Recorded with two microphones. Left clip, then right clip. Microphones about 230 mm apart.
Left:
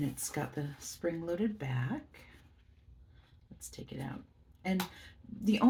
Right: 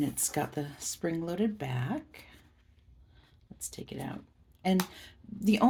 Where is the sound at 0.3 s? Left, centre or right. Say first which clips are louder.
Right 5 dB; right.